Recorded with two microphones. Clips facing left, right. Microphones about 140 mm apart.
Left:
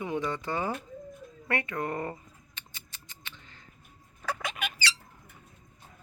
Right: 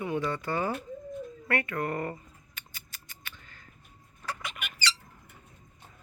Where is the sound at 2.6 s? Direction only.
20° left (ahead or behind).